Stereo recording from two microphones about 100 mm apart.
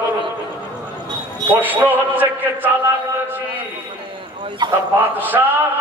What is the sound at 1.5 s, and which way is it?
A man's voice, 20° right (ahead or behind).